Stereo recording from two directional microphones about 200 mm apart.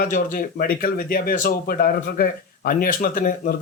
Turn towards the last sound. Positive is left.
turn(degrees=45)  # may be behind; listen again after turning